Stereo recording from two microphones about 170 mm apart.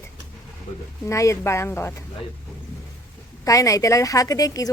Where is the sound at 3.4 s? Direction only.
20° left (ahead or behind).